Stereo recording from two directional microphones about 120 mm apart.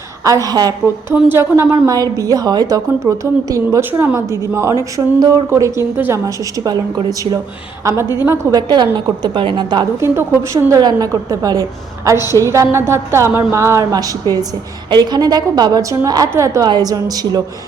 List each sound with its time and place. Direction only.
0.3 s a woman's voice: 30° right (ahead or behind)
1.1 s a woman's voice: 20° right (ahead or behind)
7.9 s a woman's voice: 20° right (ahead or behind)
8.5 s a woman's voice: 35° right (ahead or behind)
10.0 s a woman's voice: 25° right (ahead or behind)
12.1 s a woman's voice: 35° left (ahead or behind)
12.4 s a woman's voice: 25° right (ahead or behind)